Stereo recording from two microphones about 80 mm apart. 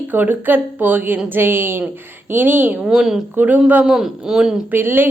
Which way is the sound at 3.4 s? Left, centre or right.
Centre.